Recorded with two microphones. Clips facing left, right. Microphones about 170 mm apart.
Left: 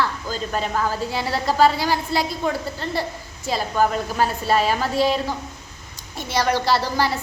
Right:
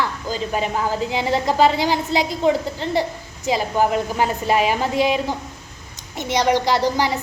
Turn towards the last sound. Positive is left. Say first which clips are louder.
# right 2 dB
turn(degrees=-15)  # may be behind; listen again after turning